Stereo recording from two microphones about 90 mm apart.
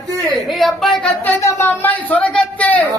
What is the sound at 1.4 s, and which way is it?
Speech, 30° left (ahead or behind).